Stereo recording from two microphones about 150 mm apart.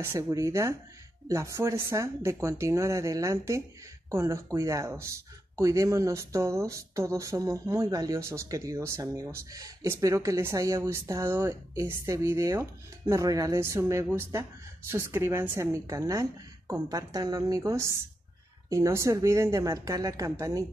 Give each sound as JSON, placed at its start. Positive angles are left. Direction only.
{"t": 0.0, "sound": "speech", "side_deg": -20}